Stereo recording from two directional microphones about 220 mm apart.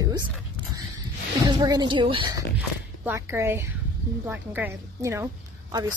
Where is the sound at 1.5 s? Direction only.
20° right (ahead or behind).